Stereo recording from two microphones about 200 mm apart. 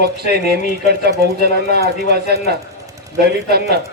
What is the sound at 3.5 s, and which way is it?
Speech, 55° right (ahead or behind).